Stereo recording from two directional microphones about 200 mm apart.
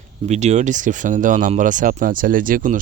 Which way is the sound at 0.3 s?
35° right (ahead or behind).